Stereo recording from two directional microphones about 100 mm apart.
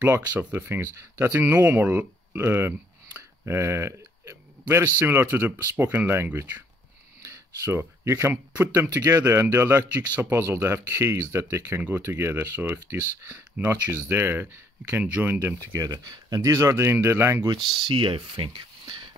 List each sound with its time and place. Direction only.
0.4 s speech: 20° right (ahead or behind)
7.2 s speech: 30° right (ahead or behind)
15.8 s speech: 40° right (ahead or behind); by 17.5 s 25° right (ahead or behind)
17.7 s speech: 55° right (ahead or behind)